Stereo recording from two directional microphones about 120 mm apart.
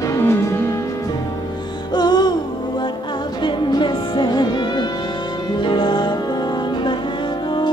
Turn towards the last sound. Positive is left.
turn(degrees=40)  # may be behind; listen again after turning